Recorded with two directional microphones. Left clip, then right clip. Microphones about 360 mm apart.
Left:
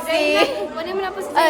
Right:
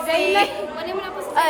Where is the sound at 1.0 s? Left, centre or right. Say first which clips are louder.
Left 2 dB; centre.